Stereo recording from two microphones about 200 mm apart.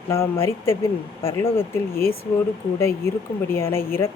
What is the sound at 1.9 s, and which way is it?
Speech, 50° left (ahead or behind).